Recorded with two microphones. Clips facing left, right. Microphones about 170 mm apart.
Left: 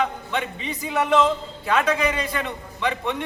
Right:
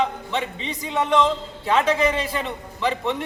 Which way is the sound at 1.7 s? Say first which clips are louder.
Right 2 dB; 25° right (ahead or behind).